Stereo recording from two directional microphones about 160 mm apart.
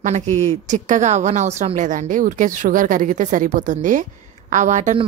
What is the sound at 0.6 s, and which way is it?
A woman's voice, 50° right (ahead or behind).